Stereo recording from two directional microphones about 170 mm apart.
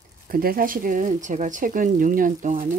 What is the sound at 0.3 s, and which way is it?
Speech, 60° right (ahead or behind).